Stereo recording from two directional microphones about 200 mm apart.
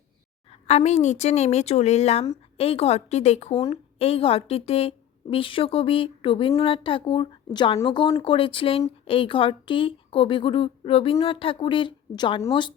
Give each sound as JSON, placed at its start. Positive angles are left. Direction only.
{"t": 0.7, "sound": "a woman's voice", "side_deg": 35}
{"t": 3.5, "sound": "speech", "side_deg": 20}